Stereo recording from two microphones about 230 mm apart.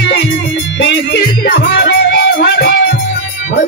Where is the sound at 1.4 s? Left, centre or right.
Left.